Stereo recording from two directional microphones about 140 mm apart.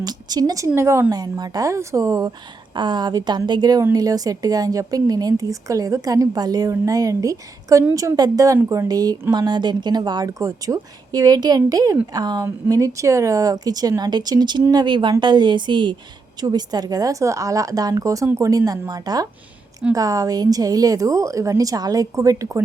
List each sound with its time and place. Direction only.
0.0 s a woman's voice: 30° right (ahead or behind)